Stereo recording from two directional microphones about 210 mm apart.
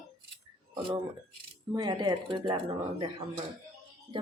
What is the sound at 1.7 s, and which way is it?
Speech, 20° right (ahead or behind).